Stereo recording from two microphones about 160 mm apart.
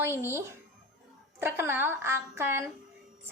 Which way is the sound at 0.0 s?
15° right (ahead or behind).